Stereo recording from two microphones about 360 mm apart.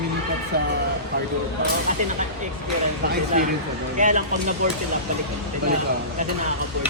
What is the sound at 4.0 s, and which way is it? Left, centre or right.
Speech, right.